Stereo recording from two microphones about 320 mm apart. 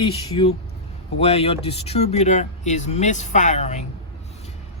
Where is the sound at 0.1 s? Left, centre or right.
Centre.